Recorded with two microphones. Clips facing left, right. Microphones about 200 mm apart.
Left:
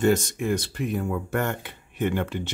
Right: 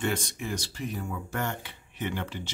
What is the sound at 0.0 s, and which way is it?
Speech, 45° left (ahead or behind).